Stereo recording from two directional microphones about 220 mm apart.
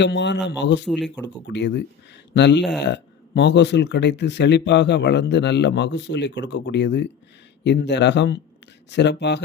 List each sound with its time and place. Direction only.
0.0 s speech: 50° left (ahead or behind)
0.9 s speech: centre (ahead or behind)
1.5 s speech: 50° left (ahead or behind)